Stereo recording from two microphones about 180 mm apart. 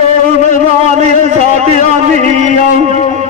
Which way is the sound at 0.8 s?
35° right (ahead or behind).